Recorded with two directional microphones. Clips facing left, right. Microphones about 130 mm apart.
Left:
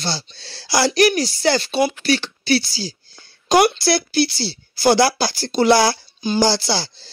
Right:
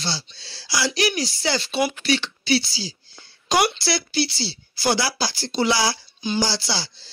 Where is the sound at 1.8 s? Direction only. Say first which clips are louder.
Left 4 dB; 40° left (ahead or behind).